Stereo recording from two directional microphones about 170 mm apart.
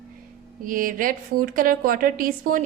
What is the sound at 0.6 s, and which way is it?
A woman's voice, 55° right (ahead or behind).